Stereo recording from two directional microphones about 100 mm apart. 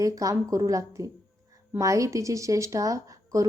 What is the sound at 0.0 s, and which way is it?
Speech, 35° right (ahead or behind).